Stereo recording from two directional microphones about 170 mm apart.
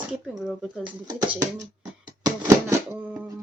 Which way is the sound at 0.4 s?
Centre (ahead or behind).